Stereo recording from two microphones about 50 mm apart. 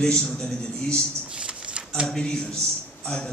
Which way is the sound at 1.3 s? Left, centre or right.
Right.